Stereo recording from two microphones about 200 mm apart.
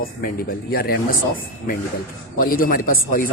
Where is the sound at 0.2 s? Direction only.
50° left (ahead or behind).